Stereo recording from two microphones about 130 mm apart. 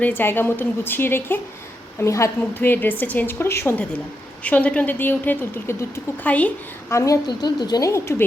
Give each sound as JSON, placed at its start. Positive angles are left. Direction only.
{"t": 0.0, "sound": "a woman's voice", "side_deg": 15}
{"t": 6.9, "sound": "a woman's voice", "side_deg": 25}